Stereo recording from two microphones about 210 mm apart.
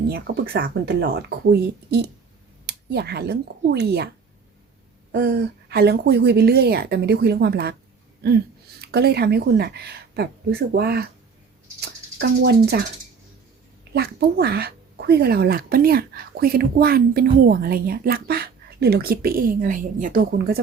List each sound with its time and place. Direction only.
0.1 s speech: 50° right (ahead or behind)
5.1 s speech: 50° right (ahead or behind)
13.9 s speech: 50° right (ahead or behind)